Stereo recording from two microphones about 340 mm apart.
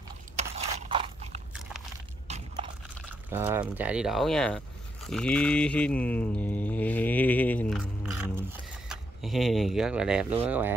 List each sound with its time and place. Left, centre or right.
0.7 s scrape: centre
2.2 s biting: centre
3.3 s speech: centre